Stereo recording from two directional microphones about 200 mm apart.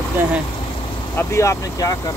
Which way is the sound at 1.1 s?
15° left (ahead or behind).